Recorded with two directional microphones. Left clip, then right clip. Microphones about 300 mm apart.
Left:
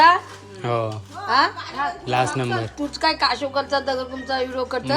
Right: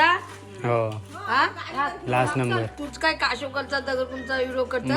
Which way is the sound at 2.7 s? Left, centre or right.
Left.